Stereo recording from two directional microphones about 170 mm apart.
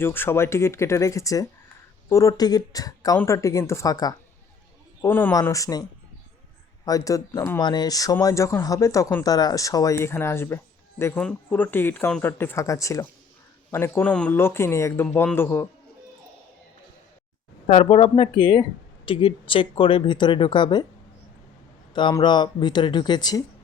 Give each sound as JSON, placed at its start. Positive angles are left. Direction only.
{"t": 0.0, "sound": "speech", "side_deg": 15}
{"t": 6.8, "sound": "speech", "side_deg": 20}
{"t": 17.7, "sound": "speech", "side_deg": 35}
{"t": 21.9, "sound": "speech", "side_deg": 25}